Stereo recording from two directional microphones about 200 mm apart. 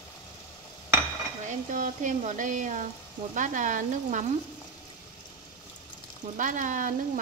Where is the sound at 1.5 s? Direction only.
40° right (ahead or behind).